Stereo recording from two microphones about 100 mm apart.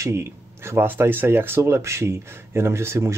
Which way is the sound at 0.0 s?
25° right (ahead or behind).